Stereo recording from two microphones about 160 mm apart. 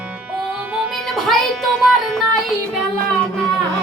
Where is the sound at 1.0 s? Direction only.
Centre (ahead or behind).